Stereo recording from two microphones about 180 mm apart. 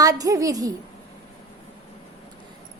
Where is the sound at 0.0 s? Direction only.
20° right (ahead or behind).